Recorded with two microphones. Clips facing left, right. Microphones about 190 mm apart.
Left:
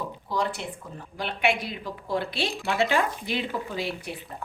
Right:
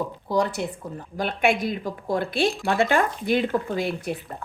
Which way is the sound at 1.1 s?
45° right (ahead or behind).